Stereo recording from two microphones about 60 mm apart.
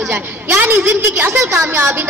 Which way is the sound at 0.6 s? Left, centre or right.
Right.